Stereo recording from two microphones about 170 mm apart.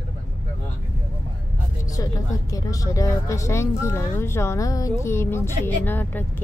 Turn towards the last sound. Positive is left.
turn(degrees=10)  # may be behind; listen again after turning